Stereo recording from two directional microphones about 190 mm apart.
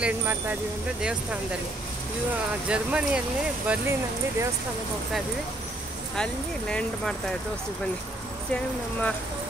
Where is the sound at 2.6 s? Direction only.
5° right (ahead or behind).